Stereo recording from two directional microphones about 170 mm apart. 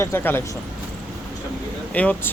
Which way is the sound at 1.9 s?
10° left (ahead or behind).